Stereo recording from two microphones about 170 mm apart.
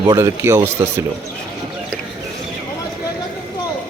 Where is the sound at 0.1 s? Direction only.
15° right (ahead or behind).